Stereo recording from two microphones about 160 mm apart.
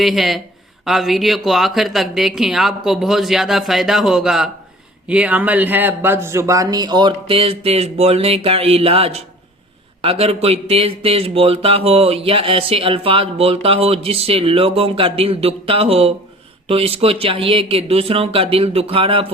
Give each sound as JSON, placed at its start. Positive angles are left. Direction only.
{"t": 0.0, "sound": "speech", "side_deg": 0}